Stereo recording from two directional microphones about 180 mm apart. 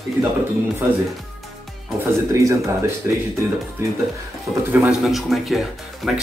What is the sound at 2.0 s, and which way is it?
Speech, 15° right (ahead or behind).